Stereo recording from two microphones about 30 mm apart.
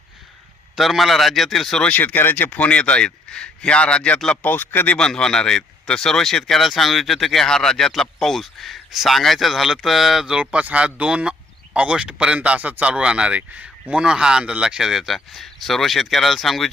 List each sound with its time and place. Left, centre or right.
0.8 s speech: centre
2.2 s speech: left
2.6 s a man's voice: left
4.4 s speech: left
4.9 s speech: left
6.7 s speech: centre
7.4 s speech: left; by 8.8 s centre
8.9 s a man's voice: centre
9.1 s speech: centre
10.4 s speech: right
14.0 s speech: right
14.8 s speech: centre
15.0 s speech: centre